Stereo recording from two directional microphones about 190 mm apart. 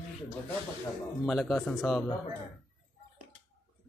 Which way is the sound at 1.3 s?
Centre (ahead or behind).